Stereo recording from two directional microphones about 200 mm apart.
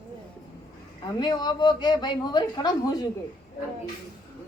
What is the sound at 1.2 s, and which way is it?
Speech, 20° left (ahead or behind).